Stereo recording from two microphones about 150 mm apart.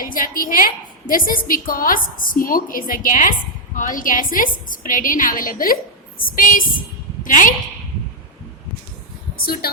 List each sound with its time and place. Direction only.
0.0 s a woman's voice: 70° left (ahead or behind)
9.4 s speech: 90° left